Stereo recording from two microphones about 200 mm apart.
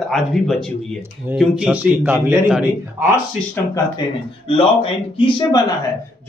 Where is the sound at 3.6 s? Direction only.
10° left (ahead or behind).